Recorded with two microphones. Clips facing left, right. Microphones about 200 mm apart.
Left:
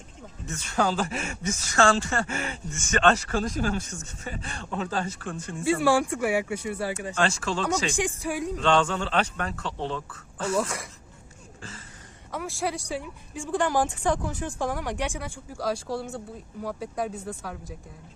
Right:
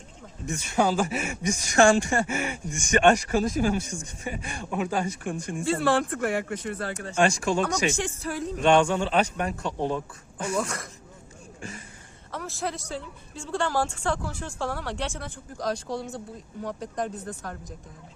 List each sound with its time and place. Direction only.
0.4 s speech: 10° right (ahead or behind)
5.6 s a woman's voice: 10° left (ahead or behind)
7.2 s speech: 15° right (ahead or behind)
7.9 s a woman's voice: 15° left (ahead or behind)
8.5 s speech: 15° right (ahead or behind)
12.3 s a woman's voice: 10° left (ahead or behind)